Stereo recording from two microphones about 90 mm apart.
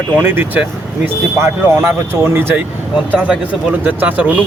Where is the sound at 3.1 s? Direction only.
15° right (ahead or behind).